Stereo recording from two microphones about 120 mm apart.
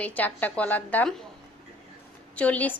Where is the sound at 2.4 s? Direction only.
15° left (ahead or behind).